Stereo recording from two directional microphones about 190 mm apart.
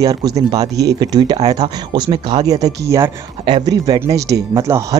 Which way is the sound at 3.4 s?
25° right (ahead or behind).